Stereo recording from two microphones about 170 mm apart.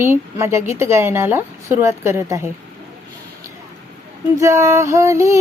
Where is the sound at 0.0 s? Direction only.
15° right (ahead or behind).